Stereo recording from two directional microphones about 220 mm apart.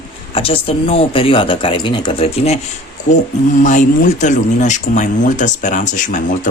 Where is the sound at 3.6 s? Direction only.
35° left (ahead or behind).